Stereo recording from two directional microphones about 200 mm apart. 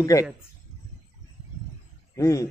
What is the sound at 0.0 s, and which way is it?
Speech, 15° left (ahead or behind).